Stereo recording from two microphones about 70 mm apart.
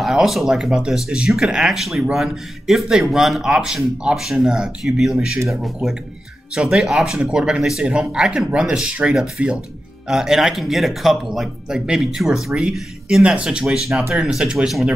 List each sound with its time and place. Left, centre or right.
0.0 s speech: centre